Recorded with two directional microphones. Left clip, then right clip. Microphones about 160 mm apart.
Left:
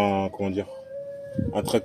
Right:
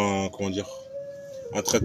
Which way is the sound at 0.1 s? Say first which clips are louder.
Left 2 dB; 35° right (ahead or behind).